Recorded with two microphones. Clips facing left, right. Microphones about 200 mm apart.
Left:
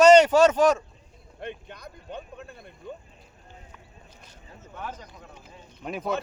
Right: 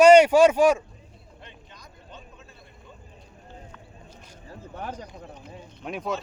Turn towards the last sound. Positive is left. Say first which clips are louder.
# even
turn(degrees=0)  # may be behind; listen again after turning